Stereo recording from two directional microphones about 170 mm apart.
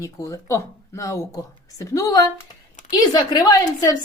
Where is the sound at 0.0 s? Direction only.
20° left (ahead or behind).